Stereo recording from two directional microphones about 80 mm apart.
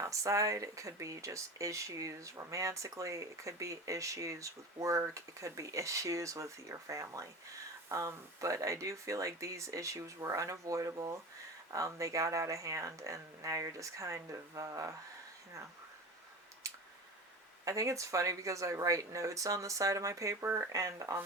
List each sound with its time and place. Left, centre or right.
0.0 s speech: right
17.7 s speech: right
20.8 s speech: right